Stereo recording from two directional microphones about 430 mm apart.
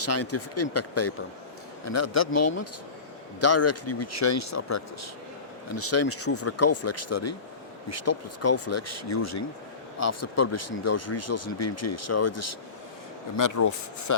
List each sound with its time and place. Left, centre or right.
0.0 s speech: left